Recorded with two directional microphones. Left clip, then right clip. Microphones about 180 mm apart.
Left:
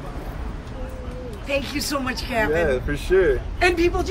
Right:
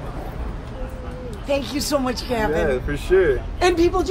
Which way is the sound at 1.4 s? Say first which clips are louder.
Right 2 dB; 15° right (ahead or behind).